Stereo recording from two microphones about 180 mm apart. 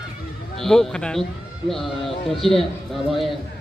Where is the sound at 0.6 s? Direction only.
Centre (ahead or behind).